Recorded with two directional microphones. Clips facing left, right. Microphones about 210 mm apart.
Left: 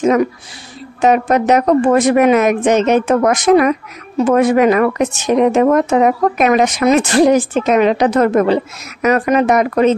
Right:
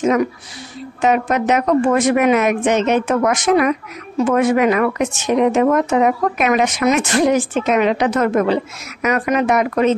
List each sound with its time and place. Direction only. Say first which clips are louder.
1.0 s a woman's voice: left 4 dB; 40° left (ahead or behind)